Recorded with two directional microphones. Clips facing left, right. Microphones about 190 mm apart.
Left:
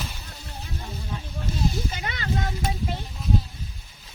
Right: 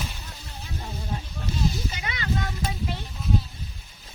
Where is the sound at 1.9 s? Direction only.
45° left (ahead or behind).